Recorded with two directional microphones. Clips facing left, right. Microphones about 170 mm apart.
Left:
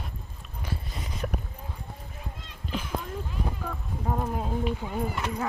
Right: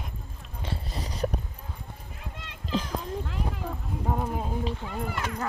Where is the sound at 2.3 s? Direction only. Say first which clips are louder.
Right 6 dB; 90° right.